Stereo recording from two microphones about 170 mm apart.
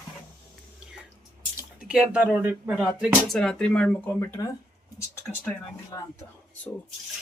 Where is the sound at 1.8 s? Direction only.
5° right (ahead or behind); by 4.4 s 15° left (ahead or behind).